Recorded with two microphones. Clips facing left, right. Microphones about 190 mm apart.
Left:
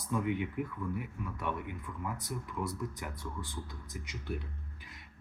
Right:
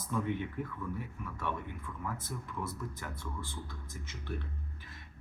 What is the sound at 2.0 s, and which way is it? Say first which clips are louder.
Speech: left 1 dB; 15° left (ahead or behind).